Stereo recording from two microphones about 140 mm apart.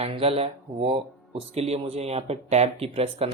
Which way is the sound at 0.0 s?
45° right (ahead or behind).